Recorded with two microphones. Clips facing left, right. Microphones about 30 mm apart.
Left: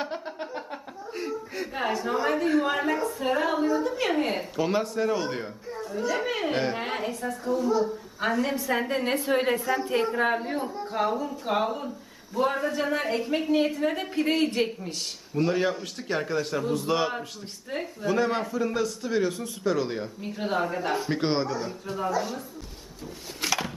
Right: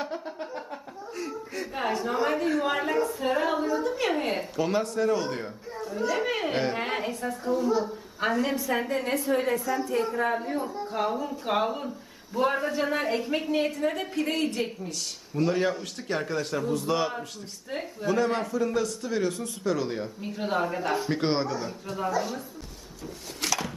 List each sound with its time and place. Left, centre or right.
0.0 s a sound: left
1.5 s a man's voice: centre
9.0 s a woman's voice: left
10.9 s a man's voice: centre
14.3 s a man's voice: left
15.4 s a man's voice: centre
23.5 s a sound: left